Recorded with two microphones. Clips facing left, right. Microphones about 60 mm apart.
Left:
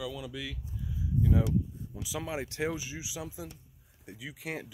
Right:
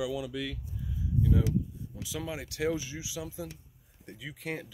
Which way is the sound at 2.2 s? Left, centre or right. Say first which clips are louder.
Even; left.